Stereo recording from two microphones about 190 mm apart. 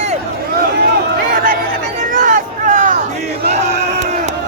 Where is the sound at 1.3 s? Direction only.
45° right (ahead or behind).